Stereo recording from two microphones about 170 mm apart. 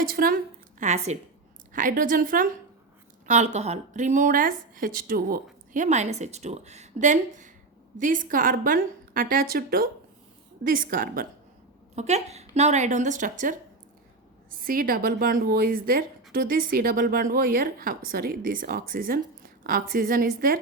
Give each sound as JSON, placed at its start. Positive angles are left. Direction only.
{"t": 0.1, "sound": "a woman's voice", "side_deg": -60}
{"t": 0.8, "sound": "a woman's voice", "side_deg": -40}
{"t": 1.7, "sound": "a woman's voice", "side_deg": -50}
{"t": 3.2, "sound": "a woman's voice", "side_deg": -45}
{"t": 5.7, "sound": "a woman's voice", "side_deg": -45}
{"t": 11.9, "sound": "a woman's voice", "side_deg": -40}
{"t": 14.6, "sound": "a woman's voice", "side_deg": -55}